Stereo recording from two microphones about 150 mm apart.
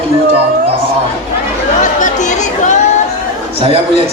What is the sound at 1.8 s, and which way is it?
Chatter, 55° left (ahead or behind).